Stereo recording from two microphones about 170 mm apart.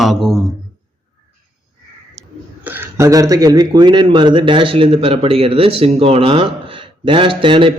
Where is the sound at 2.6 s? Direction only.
10° right (ahead or behind).